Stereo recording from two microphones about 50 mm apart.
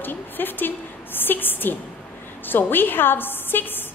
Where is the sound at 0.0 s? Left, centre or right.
Left.